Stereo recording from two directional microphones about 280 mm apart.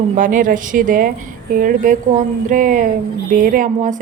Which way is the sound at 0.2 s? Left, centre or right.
Right.